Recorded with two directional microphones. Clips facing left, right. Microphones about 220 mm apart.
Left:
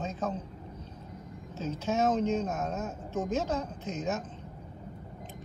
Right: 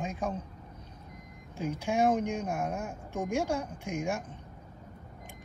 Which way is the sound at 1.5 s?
15° right (ahead or behind).